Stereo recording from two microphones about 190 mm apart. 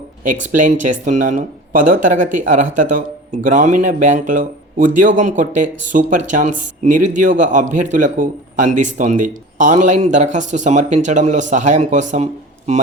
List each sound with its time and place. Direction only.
0.4 s speech: 40° right (ahead or behind)